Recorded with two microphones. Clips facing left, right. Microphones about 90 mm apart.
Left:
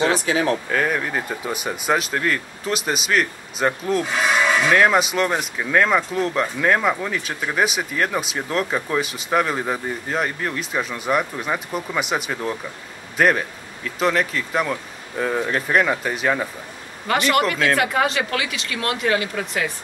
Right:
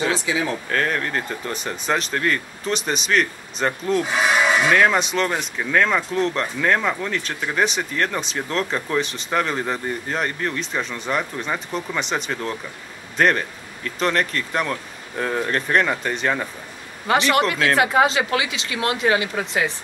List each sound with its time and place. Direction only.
0.2 s speech: 55° left (ahead or behind)
0.7 s speech: 5° left (ahead or behind)
4.2 s a sound: 10° right (ahead or behind)
4.6 s speech: 5° left (ahead or behind)
17.1 s speech: 20° right (ahead or behind)